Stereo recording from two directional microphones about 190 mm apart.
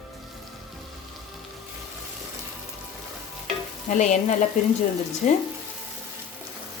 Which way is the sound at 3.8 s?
40° left (ahead or behind).